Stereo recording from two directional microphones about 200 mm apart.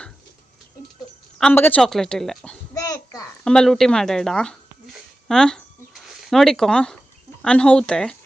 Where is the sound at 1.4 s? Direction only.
10° left (ahead or behind).